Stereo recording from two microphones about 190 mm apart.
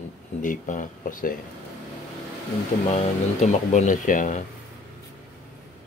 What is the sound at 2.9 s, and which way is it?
Speech, 40° left (ahead or behind).